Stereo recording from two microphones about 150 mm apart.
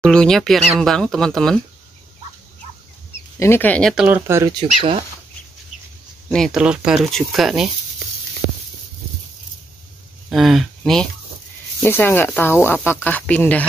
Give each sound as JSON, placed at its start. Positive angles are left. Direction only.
{"t": 0.0, "sound": "speech", "side_deg": 5}
{"t": 3.3, "sound": "speech", "side_deg": 15}
{"t": 3.9, "sound": "speech", "side_deg": -5}
{"t": 4.5, "sound": "speech", "side_deg": -30}
{"t": 6.2, "sound": "speech", "side_deg": 5}
{"t": 10.3, "sound": "speech", "side_deg": 0}
{"t": 11.8, "sound": "speech", "side_deg": 15}